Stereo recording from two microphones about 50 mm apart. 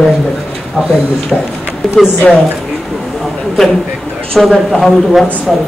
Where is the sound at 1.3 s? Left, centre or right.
Centre.